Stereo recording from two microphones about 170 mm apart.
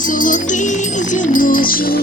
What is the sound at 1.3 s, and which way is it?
Music, 55° left (ahead or behind).